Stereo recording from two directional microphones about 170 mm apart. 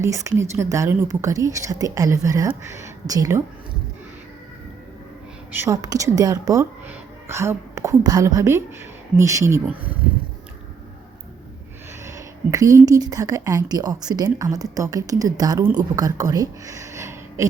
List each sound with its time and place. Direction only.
0.0 s a woman's voice: 20° right (ahead or behind)
5.5 s a woman's voice: 20° right (ahead or behind)
12.0 s a woman's voice: 20° right (ahead or behind)